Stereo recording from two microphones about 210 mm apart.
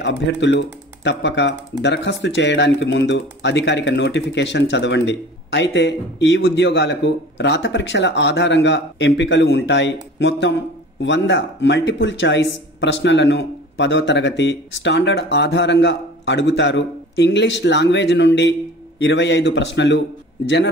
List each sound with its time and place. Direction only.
0.0 s speech: 60° left (ahead or behind)